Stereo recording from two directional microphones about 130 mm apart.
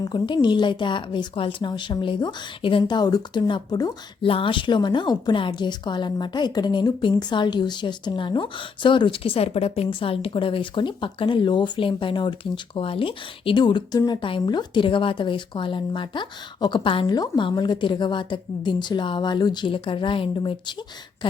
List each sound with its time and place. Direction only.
0.0 s a woman's voice: 35° left (ahead or behind)
2.8 s a woman's voice: 30° left (ahead or behind)
4.2 s a woman's voice: 45° left (ahead or behind)